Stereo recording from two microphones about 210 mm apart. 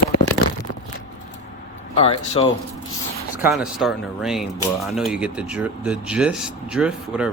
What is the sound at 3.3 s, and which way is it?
Speech, 5° right (ahead or behind).